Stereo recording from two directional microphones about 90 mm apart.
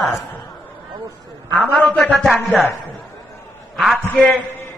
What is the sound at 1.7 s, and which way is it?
Speech, 15° left (ahead or behind).